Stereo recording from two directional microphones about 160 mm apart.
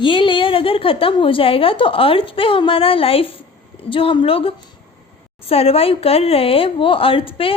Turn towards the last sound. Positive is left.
turn(degrees=35)  # may be behind; listen again after turning